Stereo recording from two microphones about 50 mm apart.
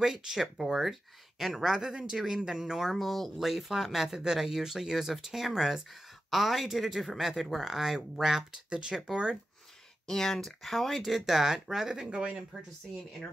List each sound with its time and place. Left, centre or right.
0.0 s speech: centre
10.0 s speech: centre
12.1 s speech: right